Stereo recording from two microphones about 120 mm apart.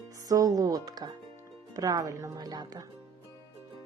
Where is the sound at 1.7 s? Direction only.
30° right (ahead or behind).